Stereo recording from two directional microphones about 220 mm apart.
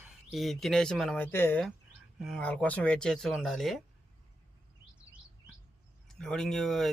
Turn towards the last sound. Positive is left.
turn(degrees=0)  # may be behind; listen again after turning